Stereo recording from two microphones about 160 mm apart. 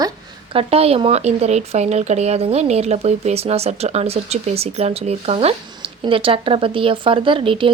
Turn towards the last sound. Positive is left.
turn(degrees=-35)  # may be behind; listen again after turning